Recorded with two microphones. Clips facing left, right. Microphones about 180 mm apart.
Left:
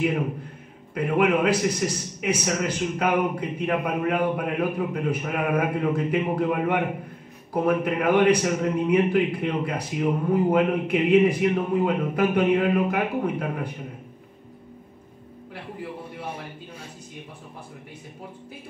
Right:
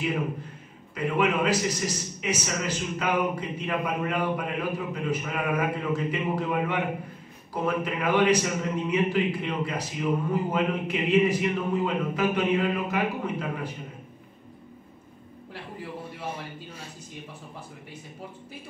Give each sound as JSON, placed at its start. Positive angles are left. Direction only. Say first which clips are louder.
{"t": 0.9, "sound": "a man's voice", "louder": "left 4 dB", "side_deg": 55}